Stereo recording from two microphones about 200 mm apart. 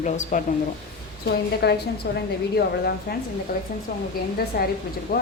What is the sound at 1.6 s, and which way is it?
A woman's voice, 55° left (ahead or behind).